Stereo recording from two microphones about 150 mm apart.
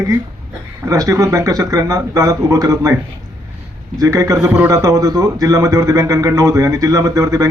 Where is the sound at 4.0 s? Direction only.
25° right (ahead or behind).